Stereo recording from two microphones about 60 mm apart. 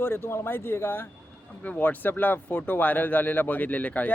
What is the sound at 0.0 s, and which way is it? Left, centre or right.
Speech, left.